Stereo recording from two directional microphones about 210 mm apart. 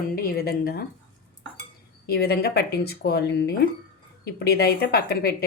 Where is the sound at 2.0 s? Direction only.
50° left (ahead or behind).